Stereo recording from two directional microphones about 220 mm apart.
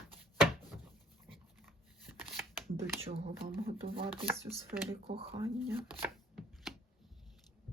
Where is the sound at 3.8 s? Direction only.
45° right (ahead or behind).